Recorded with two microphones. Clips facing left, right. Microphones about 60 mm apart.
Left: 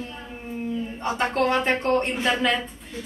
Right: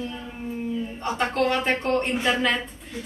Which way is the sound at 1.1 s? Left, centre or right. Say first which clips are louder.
Left 1 dB; centre.